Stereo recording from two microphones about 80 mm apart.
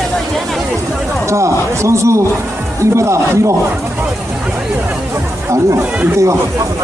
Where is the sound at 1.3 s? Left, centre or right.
Right.